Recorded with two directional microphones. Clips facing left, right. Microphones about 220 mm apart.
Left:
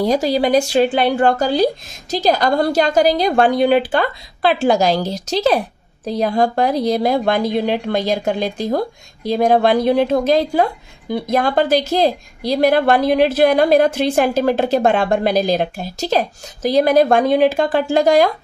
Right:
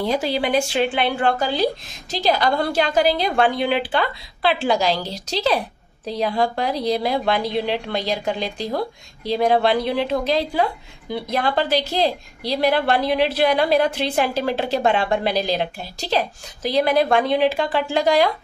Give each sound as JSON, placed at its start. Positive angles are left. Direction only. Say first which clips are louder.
{"t": 0.0, "sound": "a woman's voice", "louder": "left 5 dB", "side_deg": 40}